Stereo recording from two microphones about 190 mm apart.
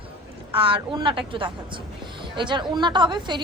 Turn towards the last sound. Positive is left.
turn(degrees=-25)  # may be behind; listen again after turning